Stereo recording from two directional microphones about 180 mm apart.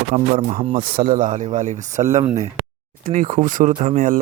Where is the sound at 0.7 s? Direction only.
55° right (ahead or behind).